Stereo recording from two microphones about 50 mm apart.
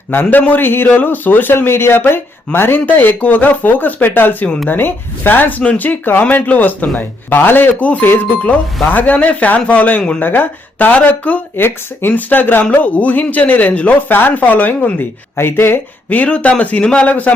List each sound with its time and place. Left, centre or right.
0.3 s a man's voice: left
11.5 s a man's voice: left
15.4 s speech: left
16.0 s a man's voice: left
17.1 s a man's voice: left